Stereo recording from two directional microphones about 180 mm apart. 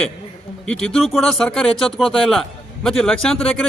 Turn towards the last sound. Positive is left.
turn(degrees=5)  # may be behind; listen again after turning